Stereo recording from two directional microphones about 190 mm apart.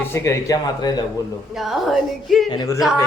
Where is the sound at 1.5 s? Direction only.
Centre (ahead or behind).